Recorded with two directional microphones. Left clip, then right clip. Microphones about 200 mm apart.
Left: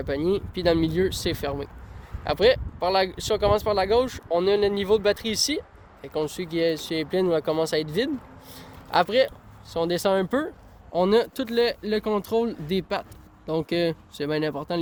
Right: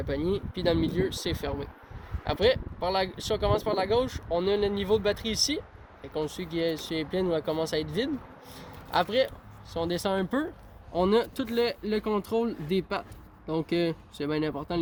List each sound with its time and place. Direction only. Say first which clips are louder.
0.0 s speech: left 5 dB; 60° left (ahead or behind)
8.5 s a sound: left 5 dB; 60° left (ahead or behind)
9.7 s speech: left 6 dB; 55° left (ahead or behind)
10.9 s speech: left 4 dB; 45° left (ahead or behind)